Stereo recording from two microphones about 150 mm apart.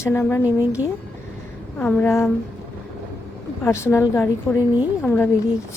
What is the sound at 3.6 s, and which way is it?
Speech, 15° left (ahead or behind).